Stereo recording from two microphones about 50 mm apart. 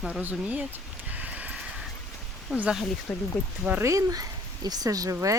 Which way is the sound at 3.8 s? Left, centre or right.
Right.